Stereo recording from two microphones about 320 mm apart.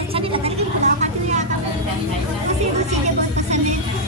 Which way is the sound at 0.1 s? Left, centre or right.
Centre.